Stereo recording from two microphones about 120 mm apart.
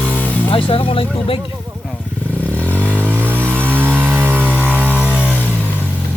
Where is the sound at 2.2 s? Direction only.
10° left (ahead or behind).